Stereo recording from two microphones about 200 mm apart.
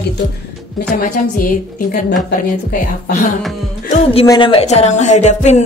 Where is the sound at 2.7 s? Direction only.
45° left (ahead or behind).